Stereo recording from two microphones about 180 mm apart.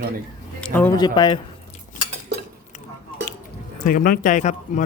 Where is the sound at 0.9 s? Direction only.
25° left (ahead or behind).